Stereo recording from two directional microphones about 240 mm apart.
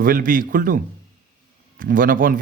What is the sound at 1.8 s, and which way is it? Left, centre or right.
Speech, right.